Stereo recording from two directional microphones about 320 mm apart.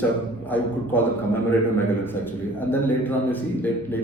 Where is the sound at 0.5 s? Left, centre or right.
Centre.